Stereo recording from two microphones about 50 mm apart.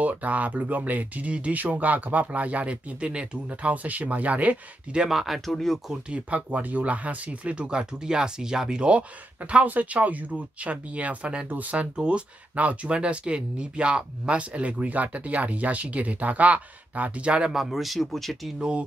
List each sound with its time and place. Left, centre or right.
0.0 s speech: right
5.0 s speech: centre
6.0 s speech: right
17.5 s speech: centre
18.6 s speech: right